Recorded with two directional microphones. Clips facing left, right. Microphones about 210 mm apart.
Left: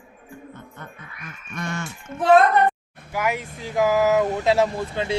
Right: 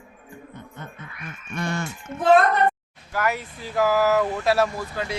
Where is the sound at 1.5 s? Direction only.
35° right (ahead or behind).